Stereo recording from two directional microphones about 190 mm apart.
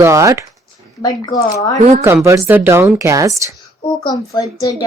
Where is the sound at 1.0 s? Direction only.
20° left (ahead or behind).